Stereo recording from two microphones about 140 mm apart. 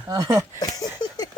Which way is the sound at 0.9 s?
30° left (ahead or behind).